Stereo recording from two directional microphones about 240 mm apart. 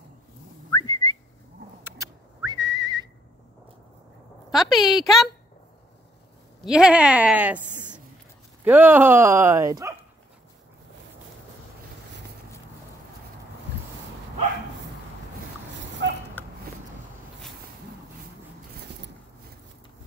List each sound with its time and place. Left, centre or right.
0.7 s whistling: centre
1.9 s whistling: centre
4.5 s speech: centre
6.6 s a woman's voice: centre
16.0 s a sound: right
16.4 s a sound: centre